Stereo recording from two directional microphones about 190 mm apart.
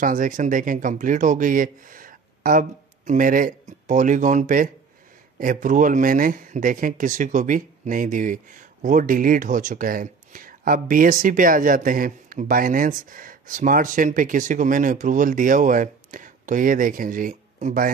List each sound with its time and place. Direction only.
0.0 s speech: 45° right (ahead or behind)